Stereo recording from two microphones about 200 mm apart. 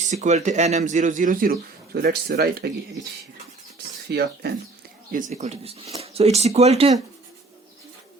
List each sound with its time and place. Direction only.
0.1 s speech: 35° right (ahead or behind); by 2.6 s 55° right (ahead or behind)
4.1 s speech: 55° right (ahead or behind)
5.1 s speech: 35° right (ahead or behind)